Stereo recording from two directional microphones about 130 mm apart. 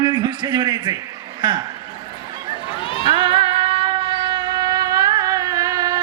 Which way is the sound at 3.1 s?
40° right (ahead or behind).